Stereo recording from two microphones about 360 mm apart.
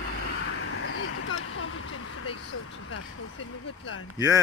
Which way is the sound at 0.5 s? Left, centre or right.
Left.